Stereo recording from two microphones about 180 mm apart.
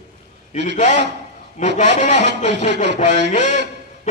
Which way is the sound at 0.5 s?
40° left (ahead or behind).